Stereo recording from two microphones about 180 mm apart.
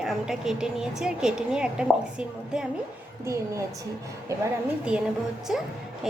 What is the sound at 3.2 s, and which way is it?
Speech, 15° right (ahead or behind).